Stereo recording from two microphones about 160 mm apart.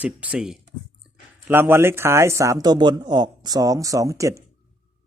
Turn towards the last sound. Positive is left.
turn(degrees=-20)  # may be behind; listen again after turning